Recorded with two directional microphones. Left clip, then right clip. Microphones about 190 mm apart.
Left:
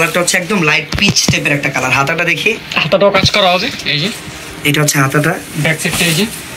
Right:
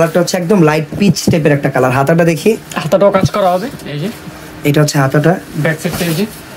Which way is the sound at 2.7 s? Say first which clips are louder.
Left 1 dB; 15° right (ahead or behind).